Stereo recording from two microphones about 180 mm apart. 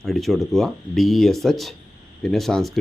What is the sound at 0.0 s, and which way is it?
Speech, centre (ahead or behind).